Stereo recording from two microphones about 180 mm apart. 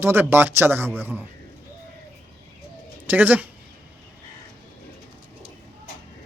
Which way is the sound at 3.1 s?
10° right (ahead or behind).